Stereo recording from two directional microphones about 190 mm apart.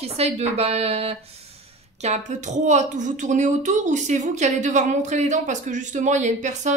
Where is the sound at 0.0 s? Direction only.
35° right (ahead or behind).